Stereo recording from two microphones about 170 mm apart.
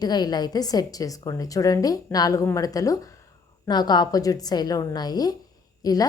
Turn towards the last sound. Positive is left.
turn(degrees=20)  # may be behind; listen again after turning